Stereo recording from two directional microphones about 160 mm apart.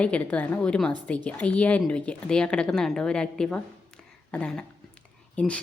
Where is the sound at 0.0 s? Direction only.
10° left (ahead or behind).